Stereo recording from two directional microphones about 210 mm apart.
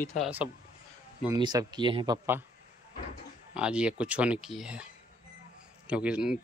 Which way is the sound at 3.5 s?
5° right (ahead or behind).